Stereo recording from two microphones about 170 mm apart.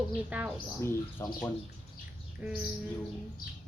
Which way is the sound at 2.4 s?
10° right (ahead or behind).